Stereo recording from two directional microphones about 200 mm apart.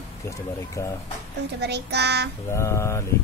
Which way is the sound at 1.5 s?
55° right (ahead or behind).